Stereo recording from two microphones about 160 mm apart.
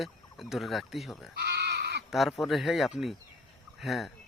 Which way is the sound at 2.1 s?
Centre (ahead or behind).